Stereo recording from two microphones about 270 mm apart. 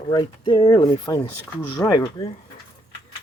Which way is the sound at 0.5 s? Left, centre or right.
Centre.